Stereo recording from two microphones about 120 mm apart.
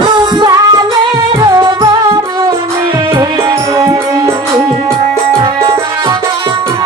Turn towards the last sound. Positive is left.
turn(degrees=-40)  # may be behind; listen again after turning